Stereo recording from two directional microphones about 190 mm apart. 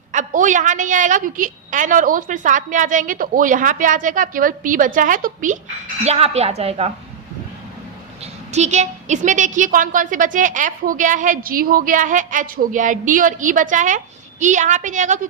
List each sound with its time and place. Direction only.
0.1 s a woman's voice: 40° right (ahead or behind)
6.1 s a woman's voice: 35° right (ahead or behind)
8.5 s a woman's voice: 35° right (ahead or behind)